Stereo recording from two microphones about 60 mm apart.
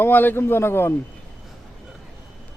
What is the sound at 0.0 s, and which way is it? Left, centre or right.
Speech, left.